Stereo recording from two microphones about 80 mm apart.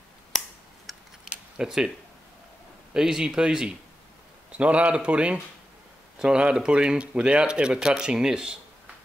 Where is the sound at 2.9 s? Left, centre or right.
Centre.